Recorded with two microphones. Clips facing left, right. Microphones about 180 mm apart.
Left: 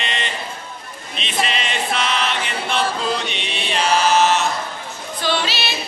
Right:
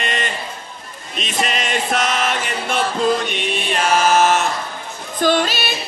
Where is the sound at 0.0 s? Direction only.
50° right (ahead or behind).